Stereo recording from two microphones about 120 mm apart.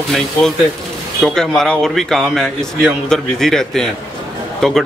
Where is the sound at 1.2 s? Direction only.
5° left (ahead or behind).